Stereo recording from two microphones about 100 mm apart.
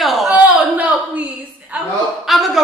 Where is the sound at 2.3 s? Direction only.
Centre (ahead or behind).